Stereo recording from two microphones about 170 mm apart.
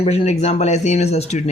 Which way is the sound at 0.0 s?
35° left (ahead or behind).